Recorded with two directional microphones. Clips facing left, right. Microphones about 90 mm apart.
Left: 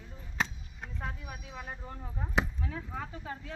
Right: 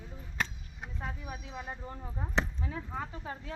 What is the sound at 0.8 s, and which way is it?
Vehicle, 15° right (ahead or behind).